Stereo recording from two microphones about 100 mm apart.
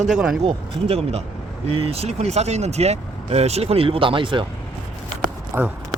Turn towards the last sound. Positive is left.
turn(degrees=-30)  # may be behind; listen again after turning